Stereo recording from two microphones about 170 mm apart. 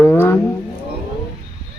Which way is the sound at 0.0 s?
10° left (ahead or behind).